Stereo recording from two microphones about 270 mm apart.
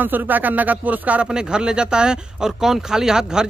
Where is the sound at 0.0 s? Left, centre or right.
Centre.